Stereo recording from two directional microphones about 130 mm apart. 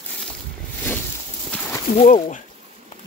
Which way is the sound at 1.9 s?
70° left (ahead or behind).